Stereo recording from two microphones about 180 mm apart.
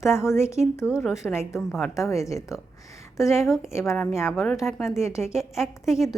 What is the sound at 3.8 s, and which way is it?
A woman's voice, centre (ahead or behind).